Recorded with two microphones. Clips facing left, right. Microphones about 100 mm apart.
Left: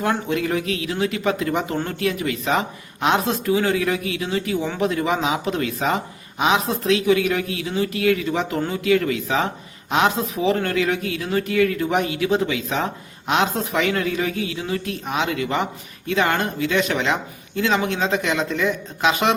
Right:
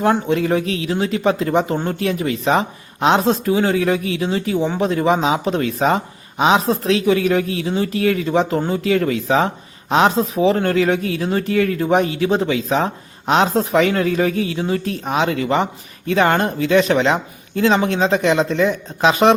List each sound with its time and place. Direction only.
0.0 s speech: 30° right (ahead or behind)